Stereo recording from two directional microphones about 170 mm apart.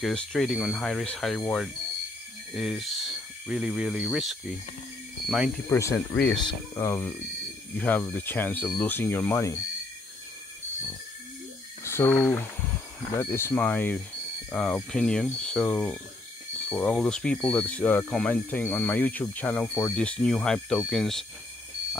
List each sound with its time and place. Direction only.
0.0 s speech: centre (ahead or behind)
5.7 s speech: 15° left (ahead or behind)
6.3 s speech: 25° left (ahead or behind)
11.8 s speech: 15° left (ahead or behind)